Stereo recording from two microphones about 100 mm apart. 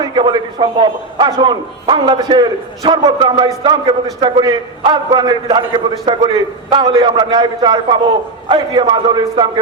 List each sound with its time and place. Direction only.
0.0 s a man's voice: 50° right (ahead or behind)